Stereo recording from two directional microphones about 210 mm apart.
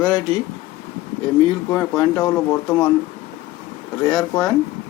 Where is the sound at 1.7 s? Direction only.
10° left (ahead or behind).